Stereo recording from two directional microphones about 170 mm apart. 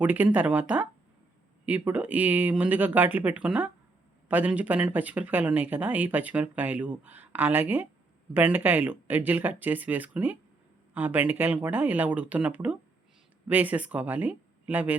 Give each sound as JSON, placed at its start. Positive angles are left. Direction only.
{"t": 0.0, "sound": "speech", "side_deg": -10}